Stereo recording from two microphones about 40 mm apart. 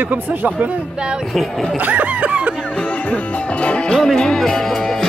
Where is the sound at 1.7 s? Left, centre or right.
Right.